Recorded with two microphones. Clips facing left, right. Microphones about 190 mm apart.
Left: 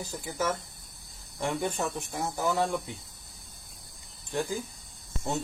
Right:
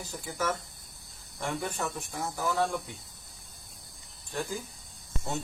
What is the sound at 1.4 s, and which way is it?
Speech, 20° left (ahead or behind).